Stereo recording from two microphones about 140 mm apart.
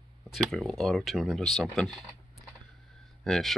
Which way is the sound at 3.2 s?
Centre (ahead or behind).